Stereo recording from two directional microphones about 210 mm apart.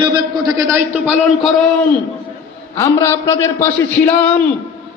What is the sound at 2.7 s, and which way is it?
Speech, 15° left (ahead or behind).